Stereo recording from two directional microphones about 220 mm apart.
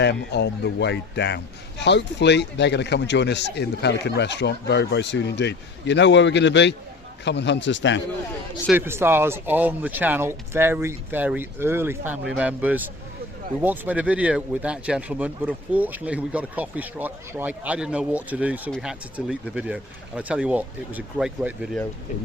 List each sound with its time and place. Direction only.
0.0 s speech: 50° left (ahead or behind)
8.7 s speech: 10° right (ahead or behind)